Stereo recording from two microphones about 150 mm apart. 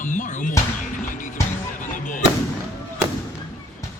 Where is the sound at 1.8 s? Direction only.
60° left (ahead or behind).